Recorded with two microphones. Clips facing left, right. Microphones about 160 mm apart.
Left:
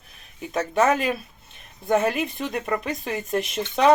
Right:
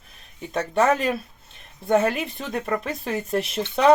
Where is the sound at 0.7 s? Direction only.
5° left (ahead or behind).